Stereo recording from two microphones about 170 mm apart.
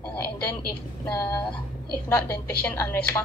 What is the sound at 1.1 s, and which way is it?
A woman's voice, 15° left (ahead or behind).